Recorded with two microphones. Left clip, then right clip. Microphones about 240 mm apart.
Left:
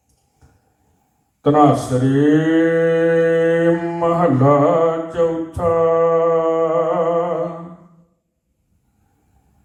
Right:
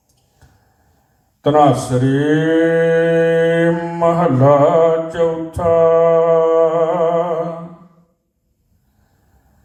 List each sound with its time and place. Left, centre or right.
1.4 s mantra: right